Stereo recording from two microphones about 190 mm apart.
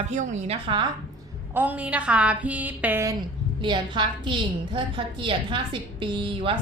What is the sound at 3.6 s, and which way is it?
A woman's voice, 25° right (ahead or behind).